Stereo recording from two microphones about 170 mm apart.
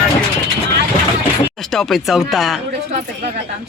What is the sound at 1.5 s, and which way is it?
Speech, centre (ahead or behind).